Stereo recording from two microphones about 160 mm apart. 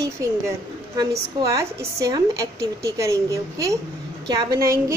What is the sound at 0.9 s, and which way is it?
A woman's voice, 20° right (ahead or behind).